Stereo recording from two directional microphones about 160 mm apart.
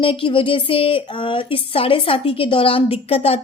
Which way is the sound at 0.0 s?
35° left (ahead or behind).